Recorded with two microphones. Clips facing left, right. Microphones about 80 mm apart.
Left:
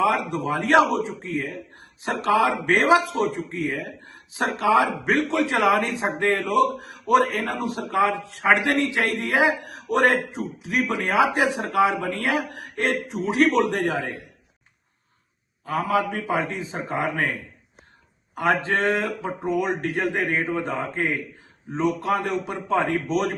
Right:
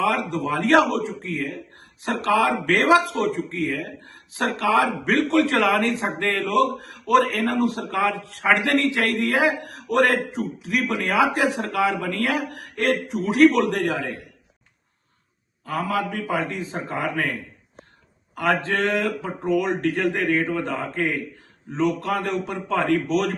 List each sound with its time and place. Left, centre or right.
0.0 s a man's voice: left
13.9 s a man's voice: left
15.6 s a man's voice: centre
18.3 s a man's voice: left